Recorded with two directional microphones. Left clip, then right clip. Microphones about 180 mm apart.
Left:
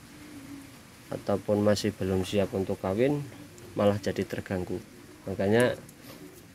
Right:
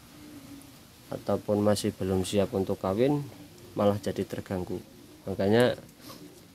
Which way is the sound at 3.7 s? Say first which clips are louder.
Left 1 dB; 5° right (ahead or behind).